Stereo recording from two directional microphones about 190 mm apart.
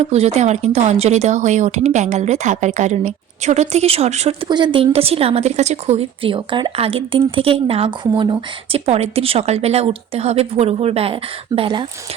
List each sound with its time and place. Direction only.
0.0 s speech: 35° right (ahead or behind)
4.4 s speech: 25° right (ahead or behind)